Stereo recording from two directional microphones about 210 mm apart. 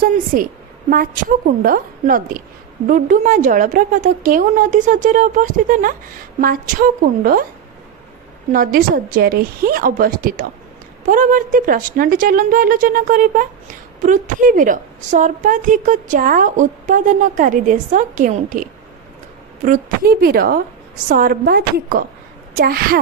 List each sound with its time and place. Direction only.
0.0 s a woman's voice: 40° right (ahead or behind)
8.5 s a woman's voice: 40° right (ahead or behind)